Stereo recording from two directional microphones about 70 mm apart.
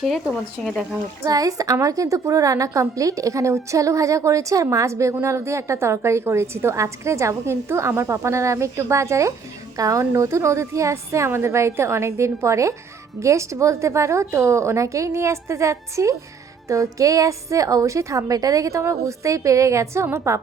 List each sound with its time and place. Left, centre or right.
0.6 s speech: centre
1.3 s a woman's voice: right
9.7 s a woman's voice: right